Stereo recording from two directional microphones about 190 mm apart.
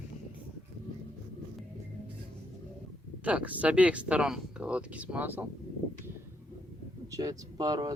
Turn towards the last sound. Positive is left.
turn(degrees=-20)  # may be behind; listen again after turning